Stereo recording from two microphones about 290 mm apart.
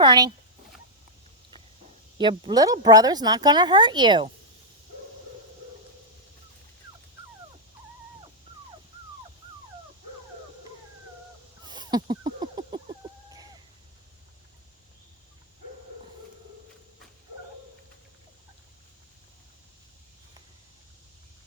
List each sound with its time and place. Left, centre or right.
0.0 s speech: centre
2.1 s speech: centre
11.6 s a sound: centre